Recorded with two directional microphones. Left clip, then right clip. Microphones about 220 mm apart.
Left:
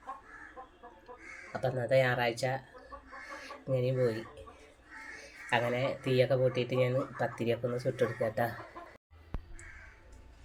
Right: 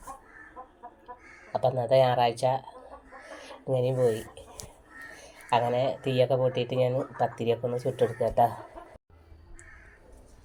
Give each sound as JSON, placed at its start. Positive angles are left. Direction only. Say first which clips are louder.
{"t": 1.5, "sound": "speech", "louder": "right 6 dB", "side_deg": 0}
{"t": 5.5, "sound": "speech", "louder": "right 6 dB", "side_deg": 0}